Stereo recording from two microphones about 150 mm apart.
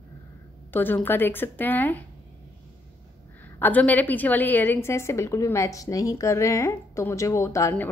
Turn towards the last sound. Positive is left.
turn(degrees=20)  # may be behind; listen again after turning